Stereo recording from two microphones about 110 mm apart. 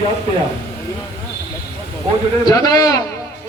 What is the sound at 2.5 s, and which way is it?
Speech, 35° left (ahead or behind).